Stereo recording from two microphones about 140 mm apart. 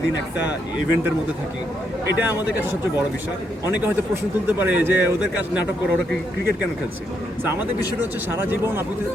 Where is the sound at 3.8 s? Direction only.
15° right (ahead or behind).